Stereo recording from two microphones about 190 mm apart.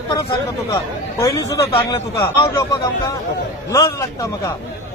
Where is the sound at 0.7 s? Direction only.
15° left (ahead or behind).